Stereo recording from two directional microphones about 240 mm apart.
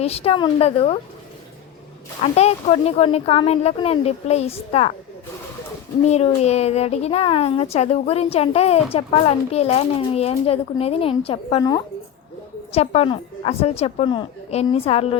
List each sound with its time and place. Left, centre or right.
0.0 s speech: left
2.3 s speech: left
6.1 s speech: left